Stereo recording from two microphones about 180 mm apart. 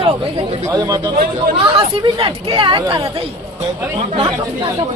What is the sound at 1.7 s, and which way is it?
Speech, 30° right (ahead or behind).